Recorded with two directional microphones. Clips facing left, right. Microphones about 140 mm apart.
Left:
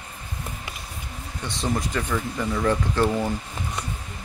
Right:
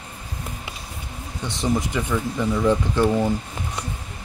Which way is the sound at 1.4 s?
20° right (ahead or behind).